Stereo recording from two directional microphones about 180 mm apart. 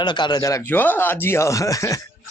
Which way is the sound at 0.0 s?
25° left (ahead or behind).